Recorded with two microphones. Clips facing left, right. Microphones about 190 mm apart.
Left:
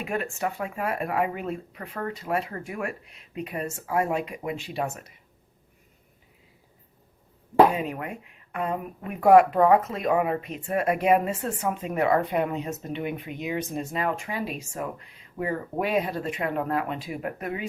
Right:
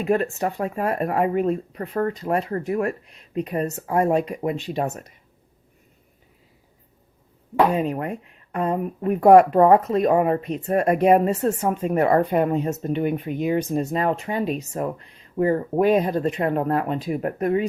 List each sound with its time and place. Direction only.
0.0 s speech: 35° right (ahead or behind)
7.7 s speech: 40° right (ahead or behind)